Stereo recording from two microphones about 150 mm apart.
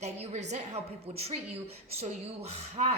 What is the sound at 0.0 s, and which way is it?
A woman's voice, 45° right (ahead or behind).